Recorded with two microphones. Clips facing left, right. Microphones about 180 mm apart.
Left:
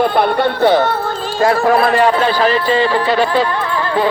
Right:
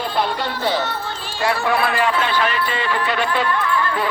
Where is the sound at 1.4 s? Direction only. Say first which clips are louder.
Left 7 dB; 45° left (ahead or behind).